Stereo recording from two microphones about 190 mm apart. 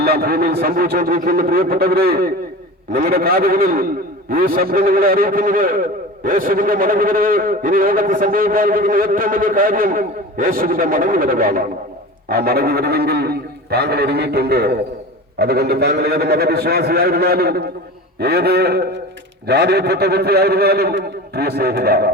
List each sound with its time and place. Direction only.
0.0 s a man's voice: 55° right (ahead or behind)